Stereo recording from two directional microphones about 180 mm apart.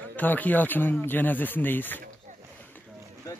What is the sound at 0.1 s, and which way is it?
Speech, 10° left (ahead or behind).